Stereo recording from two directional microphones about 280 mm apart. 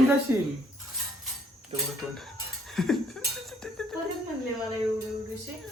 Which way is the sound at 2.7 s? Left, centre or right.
Centre.